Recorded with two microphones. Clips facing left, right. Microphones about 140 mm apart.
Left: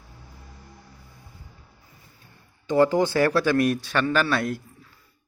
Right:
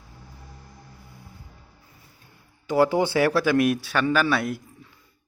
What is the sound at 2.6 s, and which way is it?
A man's voice, 10° right (ahead or behind).